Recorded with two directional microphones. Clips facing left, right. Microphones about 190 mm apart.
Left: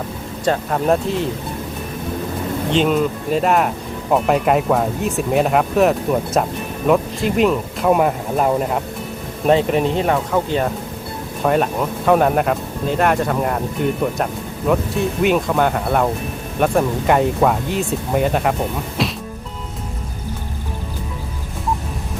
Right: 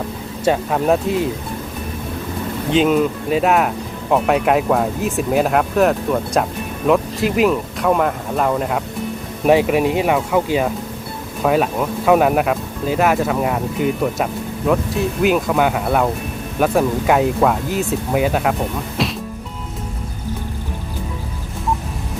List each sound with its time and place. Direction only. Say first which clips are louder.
0.4 s speech: right 1 dB; 5° right (ahead or behind)
2.7 s speech: right 2 dB; 5° right (ahead or behind)
9.5 s speech: right 1 dB; 10° right (ahead or behind)
19.0 s insect: even; centre (ahead or behind)